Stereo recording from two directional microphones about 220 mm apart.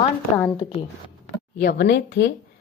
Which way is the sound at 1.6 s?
50° left (ahead or behind).